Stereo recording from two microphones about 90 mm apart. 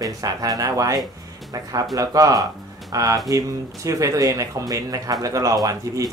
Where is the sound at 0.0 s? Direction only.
40° right (ahead or behind).